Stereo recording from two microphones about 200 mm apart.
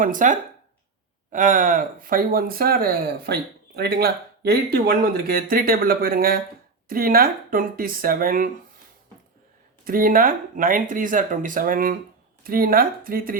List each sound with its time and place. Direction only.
0.0 s speech: 40° right (ahead or behind)
9.8 s speech: 45° right (ahead or behind)